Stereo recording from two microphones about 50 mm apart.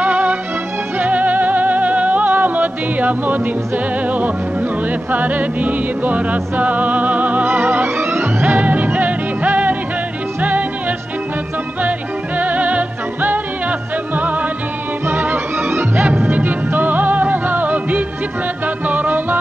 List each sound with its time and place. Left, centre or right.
0.0 s music: right
12.4 s music: right
15.2 s music: right
16.3 s music: right